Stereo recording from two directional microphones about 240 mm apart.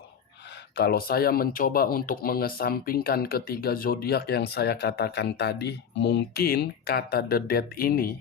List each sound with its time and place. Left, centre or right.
0.8 s speech: left